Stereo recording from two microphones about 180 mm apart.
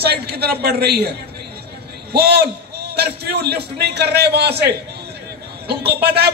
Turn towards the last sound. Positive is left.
turn(degrees=-65)  # may be behind; listen again after turning